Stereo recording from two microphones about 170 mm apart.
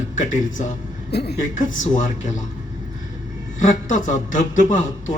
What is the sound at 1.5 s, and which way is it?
Speech, 50° left (ahead or behind).